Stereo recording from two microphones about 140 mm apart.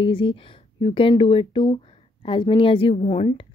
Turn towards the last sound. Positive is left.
turn(degrees=40)  # may be behind; listen again after turning